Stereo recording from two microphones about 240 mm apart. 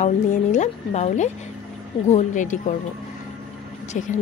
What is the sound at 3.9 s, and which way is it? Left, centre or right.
Speech, left.